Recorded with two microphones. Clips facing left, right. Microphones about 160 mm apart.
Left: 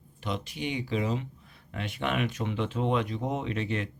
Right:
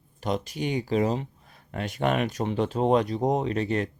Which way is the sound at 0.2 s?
40° right (ahead or behind).